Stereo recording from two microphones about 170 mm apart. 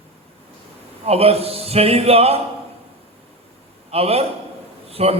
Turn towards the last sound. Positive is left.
turn(degrees=-35)  # may be behind; listen again after turning